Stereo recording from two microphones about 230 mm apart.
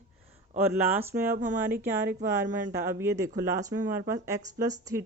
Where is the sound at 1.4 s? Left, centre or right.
Right.